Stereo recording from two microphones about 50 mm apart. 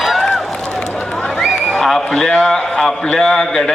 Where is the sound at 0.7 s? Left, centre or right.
Left.